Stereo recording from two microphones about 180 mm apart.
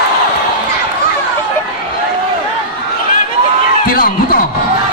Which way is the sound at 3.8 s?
50° left (ahead or behind).